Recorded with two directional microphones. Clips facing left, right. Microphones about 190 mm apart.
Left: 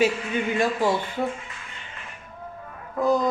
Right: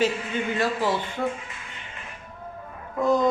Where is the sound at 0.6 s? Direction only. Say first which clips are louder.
Left 2 dB; 15° left (ahead or behind).